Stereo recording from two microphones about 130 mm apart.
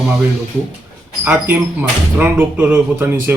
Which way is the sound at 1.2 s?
15° right (ahead or behind).